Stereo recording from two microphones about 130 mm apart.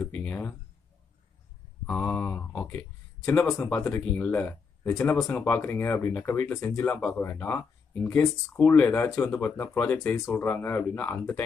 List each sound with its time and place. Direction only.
0.0 s a sound: 10° left (ahead or behind)
1.9 s speech: 10° left (ahead or behind)
5.4 s speech: 15° left (ahead or behind)